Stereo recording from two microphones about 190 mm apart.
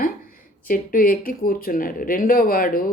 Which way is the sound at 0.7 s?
50° left (ahead or behind).